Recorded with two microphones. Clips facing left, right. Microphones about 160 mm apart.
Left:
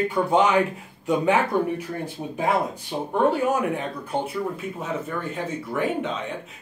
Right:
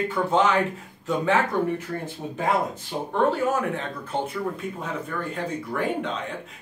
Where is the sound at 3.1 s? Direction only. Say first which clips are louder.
Left 1 dB; 15° left (ahead or behind).